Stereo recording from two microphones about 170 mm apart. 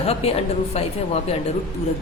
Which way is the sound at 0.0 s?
35° left (ahead or behind).